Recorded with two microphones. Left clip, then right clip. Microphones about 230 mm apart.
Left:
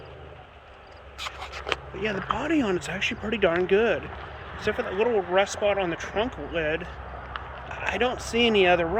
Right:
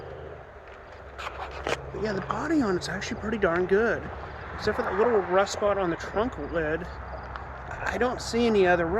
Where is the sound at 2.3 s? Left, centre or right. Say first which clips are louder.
Right 2 dB; centre.